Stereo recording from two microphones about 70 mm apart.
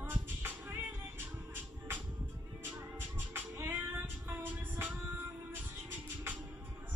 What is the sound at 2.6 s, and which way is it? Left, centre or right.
Music, right.